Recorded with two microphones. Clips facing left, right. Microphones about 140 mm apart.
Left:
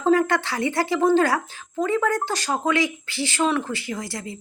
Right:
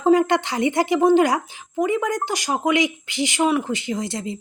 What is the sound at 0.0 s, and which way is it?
Speech, 20° right (ahead or behind).